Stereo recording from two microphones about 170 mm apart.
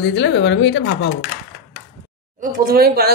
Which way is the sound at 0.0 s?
90° left.